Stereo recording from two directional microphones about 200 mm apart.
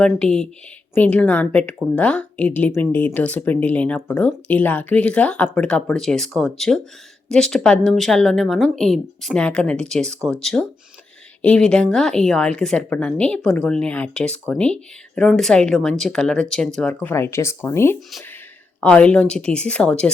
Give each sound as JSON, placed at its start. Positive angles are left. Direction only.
{"t": 0.0, "sound": "speech", "side_deg": 5}